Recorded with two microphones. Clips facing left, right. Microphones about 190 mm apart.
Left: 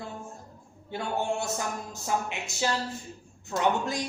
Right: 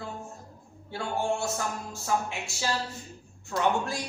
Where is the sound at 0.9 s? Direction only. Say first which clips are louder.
Even; 20° left (ahead or behind).